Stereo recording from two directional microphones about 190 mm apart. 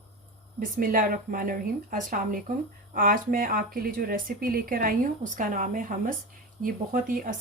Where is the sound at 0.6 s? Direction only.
45° right (ahead or behind).